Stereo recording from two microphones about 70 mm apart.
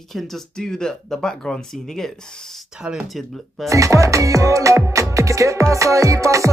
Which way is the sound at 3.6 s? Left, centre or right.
Right.